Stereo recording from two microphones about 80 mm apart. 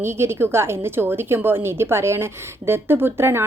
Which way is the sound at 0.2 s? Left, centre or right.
Right.